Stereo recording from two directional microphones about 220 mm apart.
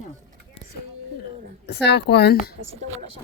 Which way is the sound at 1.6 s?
50° left (ahead or behind).